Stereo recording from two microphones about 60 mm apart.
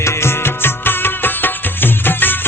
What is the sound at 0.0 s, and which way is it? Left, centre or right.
Music, left.